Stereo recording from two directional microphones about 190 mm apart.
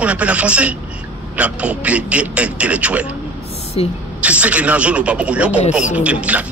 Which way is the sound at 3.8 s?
30° left (ahead or behind).